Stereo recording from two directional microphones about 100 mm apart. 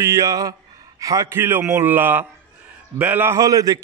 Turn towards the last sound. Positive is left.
turn(degrees=-35)  # may be behind; listen again after turning